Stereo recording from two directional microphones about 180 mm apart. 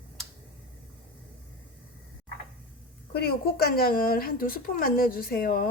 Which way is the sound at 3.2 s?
60° left (ahead or behind).